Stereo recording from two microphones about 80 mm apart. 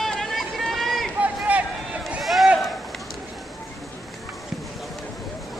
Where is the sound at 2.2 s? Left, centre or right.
Centre.